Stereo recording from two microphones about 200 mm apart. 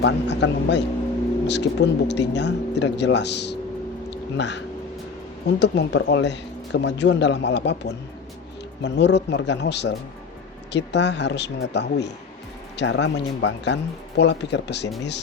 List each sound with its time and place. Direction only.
0.0 s speech: 60° left (ahead or behind)